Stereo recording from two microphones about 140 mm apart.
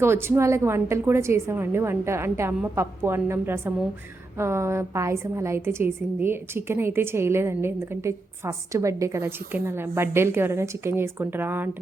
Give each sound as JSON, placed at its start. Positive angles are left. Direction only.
{"t": 0.0, "sound": "a woman's voice", "side_deg": -15}